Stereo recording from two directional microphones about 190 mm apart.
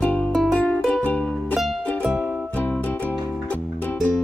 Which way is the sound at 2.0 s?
10° right (ahead or behind).